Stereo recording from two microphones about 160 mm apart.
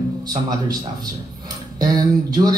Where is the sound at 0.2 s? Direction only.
25° right (ahead or behind).